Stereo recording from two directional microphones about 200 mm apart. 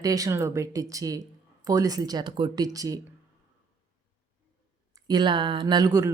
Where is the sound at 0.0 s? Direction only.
15° right (ahead or behind).